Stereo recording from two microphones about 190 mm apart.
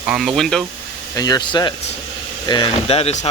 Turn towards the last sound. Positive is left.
turn(degrees=35)  # may be behind; listen again after turning